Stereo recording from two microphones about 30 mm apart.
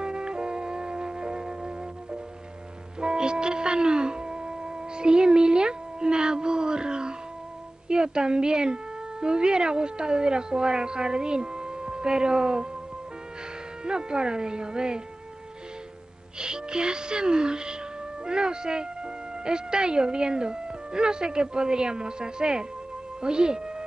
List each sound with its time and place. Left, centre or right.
0.0 s music: right
7.9 s speech: right
13.8 s speech: right
16.3 s speech: right